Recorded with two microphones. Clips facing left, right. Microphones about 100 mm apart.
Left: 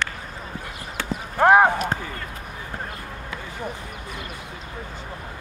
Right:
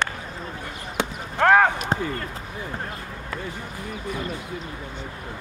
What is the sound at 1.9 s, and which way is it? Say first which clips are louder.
Basketball bounce: right 3 dB; 20° right (ahead or behind).